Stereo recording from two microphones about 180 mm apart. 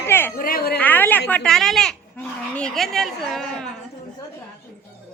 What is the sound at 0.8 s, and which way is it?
A woman's voice, 10° left (ahead or behind).